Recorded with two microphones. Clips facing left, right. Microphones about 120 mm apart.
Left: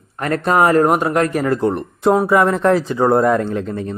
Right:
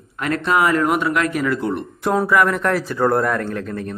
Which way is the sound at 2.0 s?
20° left (ahead or behind).